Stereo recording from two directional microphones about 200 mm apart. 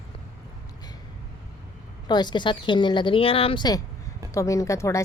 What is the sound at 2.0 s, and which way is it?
Speech, 20° left (ahead or behind).